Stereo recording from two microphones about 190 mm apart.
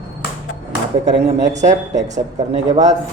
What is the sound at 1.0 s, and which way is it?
Speech, 40° right (ahead or behind).